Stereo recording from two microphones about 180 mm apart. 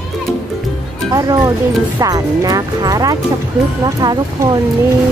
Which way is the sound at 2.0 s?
20° right (ahead or behind).